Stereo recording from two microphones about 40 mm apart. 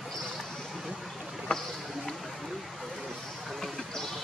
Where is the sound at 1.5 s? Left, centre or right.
Left.